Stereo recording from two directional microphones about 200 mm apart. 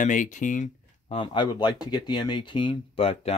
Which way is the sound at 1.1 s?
25° left (ahead or behind).